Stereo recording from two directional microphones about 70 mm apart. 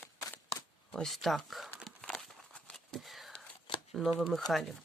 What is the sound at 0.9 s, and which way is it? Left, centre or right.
Speech, centre.